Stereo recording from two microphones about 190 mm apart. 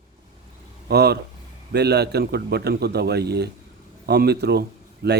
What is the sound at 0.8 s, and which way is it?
Speech, 60° right (ahead or behind).